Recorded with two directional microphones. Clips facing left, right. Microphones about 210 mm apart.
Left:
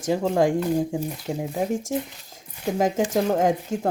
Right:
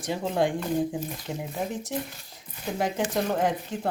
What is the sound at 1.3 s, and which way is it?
Speech, 25° left (ahead or behind).